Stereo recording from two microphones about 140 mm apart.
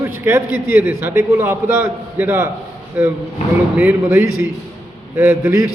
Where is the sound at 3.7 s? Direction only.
15° right (ahead or behind).